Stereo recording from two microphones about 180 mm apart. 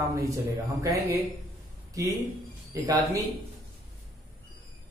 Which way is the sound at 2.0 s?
20° right (ahead or behind).